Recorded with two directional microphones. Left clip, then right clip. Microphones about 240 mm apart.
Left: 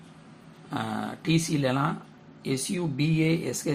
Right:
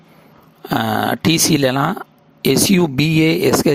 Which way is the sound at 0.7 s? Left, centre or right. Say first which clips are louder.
Right 15 dB; right.